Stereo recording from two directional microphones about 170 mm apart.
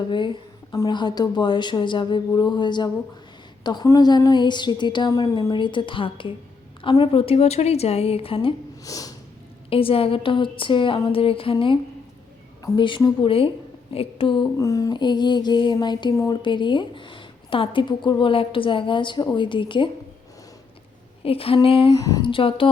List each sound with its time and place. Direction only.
0.1 s a sound: 30° left (ahead or behind)
6.8 s speech: 30° left (ahead or behind)
8.8 s snort: 20° left (ahead or behind)
9.6 s speech: 35° left (ahead or behind)
12.6 s a sound: 30° left (ahead or behind)
21.2 s speech: 35° left (ahead or behind)